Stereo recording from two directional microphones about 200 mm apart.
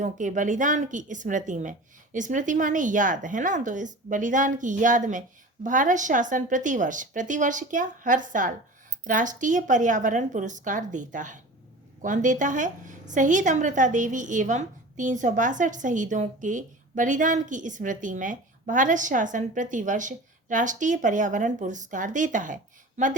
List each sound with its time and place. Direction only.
0.0 s a woman's voice: 40° right (ahead or behind)